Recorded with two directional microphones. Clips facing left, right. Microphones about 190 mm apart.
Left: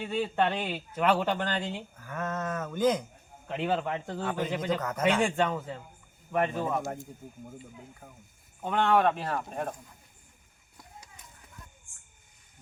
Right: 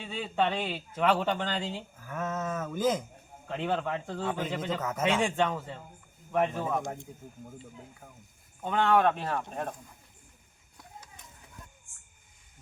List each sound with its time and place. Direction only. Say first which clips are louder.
0.0 s a man's voice: left 2 dB; 5° left (ahead or behind)
8.6 s a man's voice: even; centre (ahead or behind)